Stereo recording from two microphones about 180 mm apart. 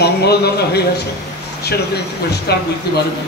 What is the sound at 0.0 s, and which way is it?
Speech, 65° left (ahead or behind).